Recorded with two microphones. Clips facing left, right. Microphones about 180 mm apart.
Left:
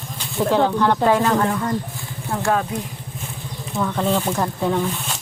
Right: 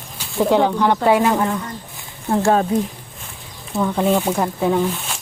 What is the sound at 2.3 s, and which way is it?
Speech, 30° right (ahead or behind).